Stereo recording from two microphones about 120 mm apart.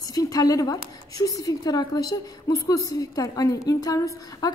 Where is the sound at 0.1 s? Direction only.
30° left (ahead or behind).